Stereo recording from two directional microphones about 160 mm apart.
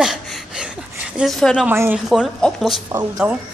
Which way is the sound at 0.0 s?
Centre (ahead or behind).